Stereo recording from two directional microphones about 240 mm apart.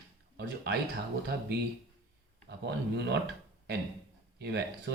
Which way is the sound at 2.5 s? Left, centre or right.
Right.